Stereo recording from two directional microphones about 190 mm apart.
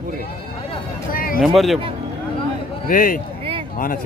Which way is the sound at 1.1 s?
50° left (ahead or behind).